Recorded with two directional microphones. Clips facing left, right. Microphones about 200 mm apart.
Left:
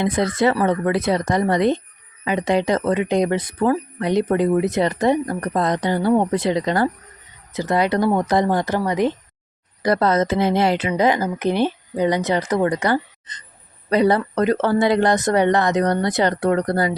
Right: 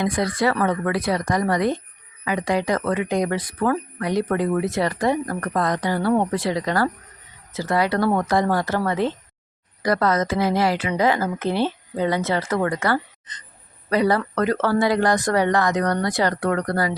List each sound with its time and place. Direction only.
0.0 s speech: 25° left (ahead or behind)
9.8 s speech: 25° left (ahead or behind)